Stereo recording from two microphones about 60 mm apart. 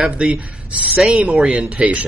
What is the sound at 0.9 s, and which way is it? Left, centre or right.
A man's voice, centre.